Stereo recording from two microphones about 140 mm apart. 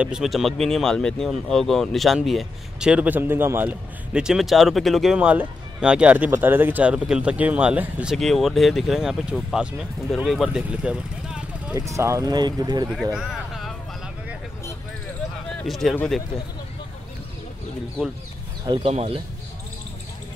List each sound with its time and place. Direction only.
0.0 s speech: 5° right (ahead or behind)
11.7 s speech: 20° right (ahead or behind)
13.1 s speech: 5° right (ahead or behind)
15.5 s speech: centre (ahead or behind)
18.7 s speech: 45° right (ahead or behind)